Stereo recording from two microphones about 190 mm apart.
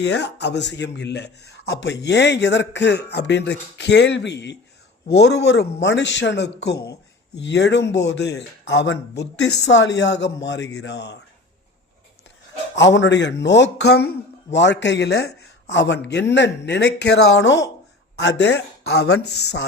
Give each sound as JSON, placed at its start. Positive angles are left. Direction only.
{"t": 0.0, "sound": "a man's voice", "side_deg": 65}
{"t": 12.7, "sound": "a man's voice", "side_deg": 70}
{"t": 15.7, "sound": "a man's voice", "side_deg": 70}